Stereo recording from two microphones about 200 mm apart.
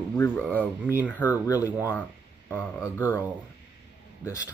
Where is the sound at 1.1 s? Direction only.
10° right (ahead or behind).